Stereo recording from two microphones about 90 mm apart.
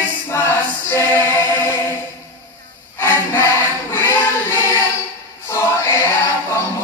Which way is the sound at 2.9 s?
25° left (ahead or behind).